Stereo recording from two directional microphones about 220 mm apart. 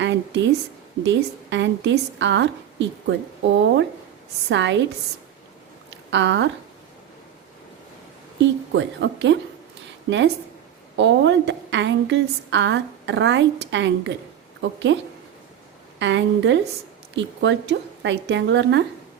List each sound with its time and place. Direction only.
0.0 s a sound: 55° right (ahead or behind)
1.0 s a woman's voice: 55° right (ahead or behind)
6.1 s speech: 55° right (ahead or behind)
8.4 s a woman's voice: 55° right (ahead or behind)
16.0 s a woman's voice: 55° right (ahead or behind)